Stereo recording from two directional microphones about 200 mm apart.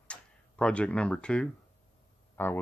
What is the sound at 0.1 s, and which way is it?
Speech, 5° left (ahead or behind).